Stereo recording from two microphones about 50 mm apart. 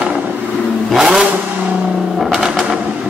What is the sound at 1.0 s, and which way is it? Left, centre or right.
Vehicle, centre.